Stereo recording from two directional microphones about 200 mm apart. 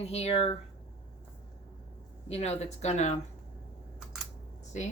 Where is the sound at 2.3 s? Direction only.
30° left (ahead or behind).